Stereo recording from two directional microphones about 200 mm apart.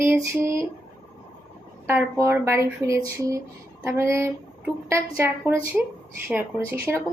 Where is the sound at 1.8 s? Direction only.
10° right (ahead or behind).